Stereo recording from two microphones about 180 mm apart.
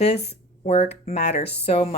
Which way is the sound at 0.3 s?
35° left (ahead or behind).